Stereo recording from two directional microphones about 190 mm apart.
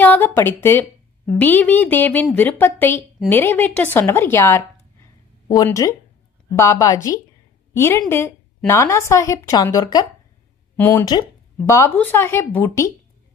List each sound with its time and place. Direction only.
0.0 s a woman's voice: 10° left (ahead or behind)
10.8 s a woman's voice: 10° left (ahead or behind)